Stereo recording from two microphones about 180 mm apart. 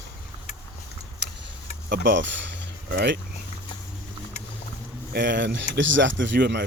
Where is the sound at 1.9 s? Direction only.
80° right.